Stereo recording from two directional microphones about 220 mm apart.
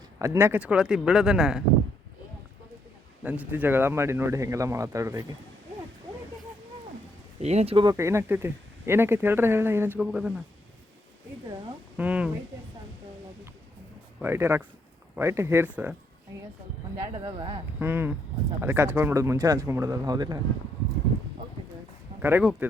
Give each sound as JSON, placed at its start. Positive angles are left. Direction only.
{"t": 0.2, "sound": "speech", "side_deg": -10}
{"t": 3.2, "sound": "speech", "side_deg": -10}
{"t": 7.3, "sound": "speech", "side_deg": -30}
{"t": 7.9, "sound": "speech", "side_deg": -10}
{"t": 11.9, "sound": "speech", "side_deg": -5}
{"t": 14.2, "sound": "speech", "side_deg": -10}
{"t": 17.2, "sound": "speech", "side_deg": -20}
{"t": 17.7, "sound": "speech", "side_deg": -10}
{"t": 22.2, "sound": "speech", "side_deg": -10}